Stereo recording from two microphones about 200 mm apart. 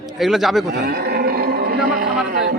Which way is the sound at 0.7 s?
50° right (ahead or behind).